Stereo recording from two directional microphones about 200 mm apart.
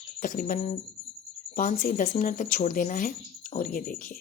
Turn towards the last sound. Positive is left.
turn(degrees=45)  # may be behind; listen again after turning